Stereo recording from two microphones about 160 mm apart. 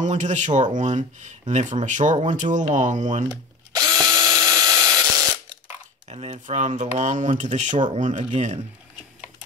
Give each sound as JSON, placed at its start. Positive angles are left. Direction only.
{"t": 0.0, "sound": "speech", "side_deg": -50}
{"t": 3.3, "sound": "drill", "side_deg": -25}
{"t": 6.0, "sound": "speech", "side_deg": -45}